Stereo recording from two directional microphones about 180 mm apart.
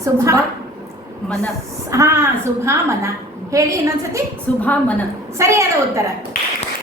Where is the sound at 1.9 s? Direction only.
15° right (ahead or behind).